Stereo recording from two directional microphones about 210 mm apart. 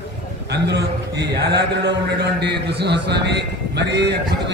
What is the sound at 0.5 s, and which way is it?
A man's voice, 55° right (ahead or behind).